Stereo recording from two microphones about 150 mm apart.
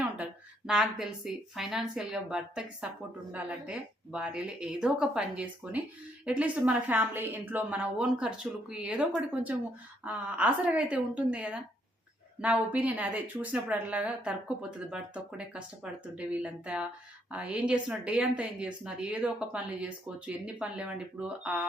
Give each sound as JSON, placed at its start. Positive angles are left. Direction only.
{"t": 0.7, "sound": "a woman's voice", "side_deg": -5}